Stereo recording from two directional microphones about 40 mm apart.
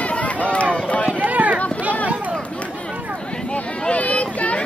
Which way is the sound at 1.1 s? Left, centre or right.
Right.